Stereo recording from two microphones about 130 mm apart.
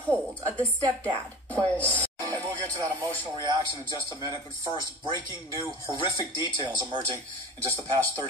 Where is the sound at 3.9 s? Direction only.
35° left (ahead or behind).